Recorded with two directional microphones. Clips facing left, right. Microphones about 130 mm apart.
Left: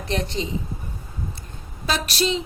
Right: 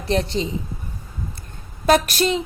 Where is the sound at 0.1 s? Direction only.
35° right (ahead or behind).